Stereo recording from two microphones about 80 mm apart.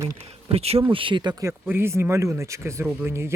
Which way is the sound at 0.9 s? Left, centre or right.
Right.